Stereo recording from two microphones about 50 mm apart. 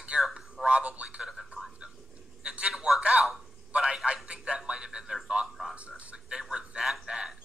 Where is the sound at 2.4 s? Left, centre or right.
Centre.